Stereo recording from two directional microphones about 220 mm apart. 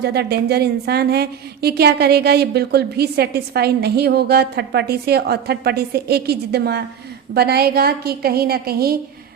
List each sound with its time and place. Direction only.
0.0 s a woman's voice: 50° right (ahead or behind)